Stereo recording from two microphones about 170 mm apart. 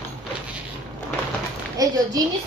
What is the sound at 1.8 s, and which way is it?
Speech, 20° right (ahead or behind).